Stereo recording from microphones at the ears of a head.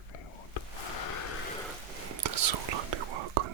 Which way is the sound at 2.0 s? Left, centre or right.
Right.